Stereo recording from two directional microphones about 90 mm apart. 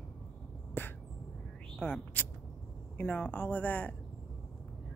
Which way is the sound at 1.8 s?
20° left (ahead or behind).